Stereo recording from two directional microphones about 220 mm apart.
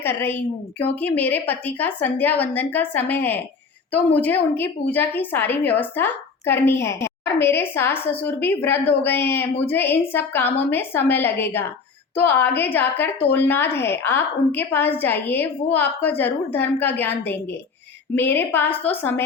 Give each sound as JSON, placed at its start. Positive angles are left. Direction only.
{"t": 0.0, "sound": "a woman's voice", "side_deg": 10}